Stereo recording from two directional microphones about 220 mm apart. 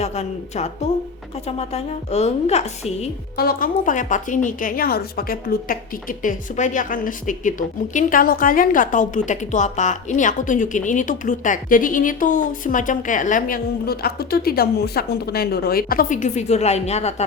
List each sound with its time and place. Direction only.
0.0 s a woman's voice: 30° left (ahead or behind)
3.3 s a woman's voice: 40° left (ahead or behind)